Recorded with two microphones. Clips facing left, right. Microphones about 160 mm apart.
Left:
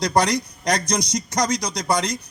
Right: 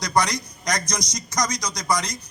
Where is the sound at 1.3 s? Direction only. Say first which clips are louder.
Left 3 dB; 30° left (ahead or behind).